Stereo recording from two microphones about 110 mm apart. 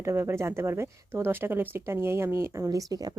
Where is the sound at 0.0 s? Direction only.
25° right (ahead or behind).